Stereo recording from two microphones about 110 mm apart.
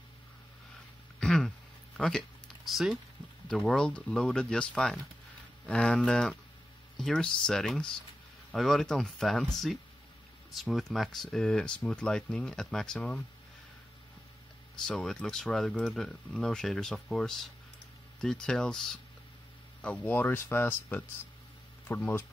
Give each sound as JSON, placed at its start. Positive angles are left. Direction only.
{"t": 1.2, "sound": "a sound", "side_deg": 5}
{"t": 2.0, "sound": "speech", "side_deg": 5}
{"t": 14.9, "sound": "speech", "side_deg": 5}